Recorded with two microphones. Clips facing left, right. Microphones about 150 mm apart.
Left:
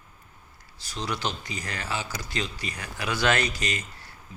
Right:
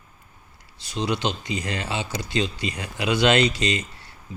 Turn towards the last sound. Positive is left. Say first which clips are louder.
# right 7 dB
turn(degrees=-25)  # may be behind; listen again after turning